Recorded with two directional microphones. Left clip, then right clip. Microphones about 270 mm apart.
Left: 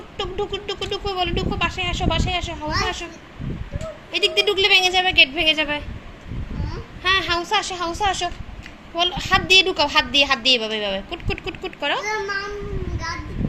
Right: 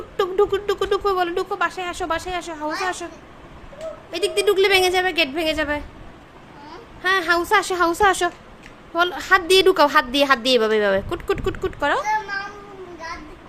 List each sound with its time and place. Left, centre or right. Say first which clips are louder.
0.2 s a woman's voice: right 7 dB; right
4.1 s a woman's voice: left 1 dB; right
7.0 s a woman's voice: right 1 dB; centre